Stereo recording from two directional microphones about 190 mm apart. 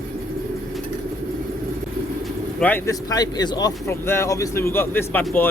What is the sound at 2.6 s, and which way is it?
A man's voice, 10° left (ahead or behind).